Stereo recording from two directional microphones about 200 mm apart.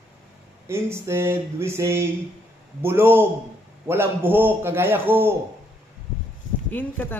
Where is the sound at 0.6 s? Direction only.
15° right (ahead or behind).